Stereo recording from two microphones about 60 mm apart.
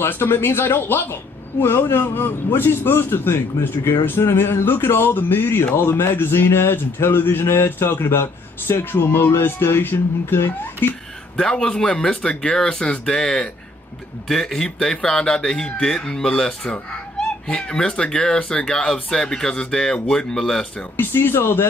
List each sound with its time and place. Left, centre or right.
0.0 s speech: left
11.3 s a man's voice: centre
20.9 s speech: left